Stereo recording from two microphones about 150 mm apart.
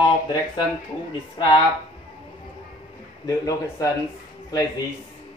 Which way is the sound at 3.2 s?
20° left (ahead or behind).